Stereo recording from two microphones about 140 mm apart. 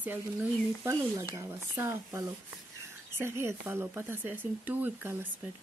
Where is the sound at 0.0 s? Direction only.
15° right (ahead or behind).